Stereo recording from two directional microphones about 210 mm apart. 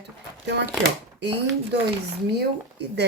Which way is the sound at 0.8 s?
55° right (ahead or behind).